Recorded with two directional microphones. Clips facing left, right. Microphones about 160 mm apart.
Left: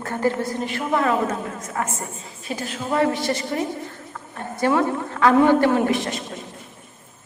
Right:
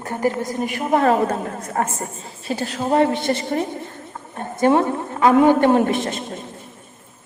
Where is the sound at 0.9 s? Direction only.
40° right (ahead or behind); by 5.7 s 20° right (ahead or behind).